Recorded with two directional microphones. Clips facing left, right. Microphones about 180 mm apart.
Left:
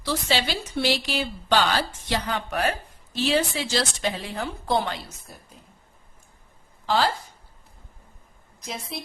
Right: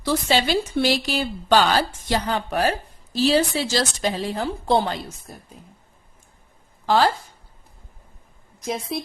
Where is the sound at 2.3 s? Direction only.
30° right (ahead or behind).